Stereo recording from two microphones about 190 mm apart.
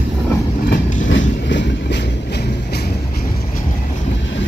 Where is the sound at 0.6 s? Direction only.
70° left (ahead or behind).